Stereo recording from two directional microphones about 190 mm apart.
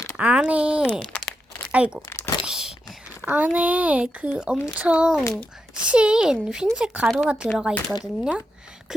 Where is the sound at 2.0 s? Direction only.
15° left (ahead or behind).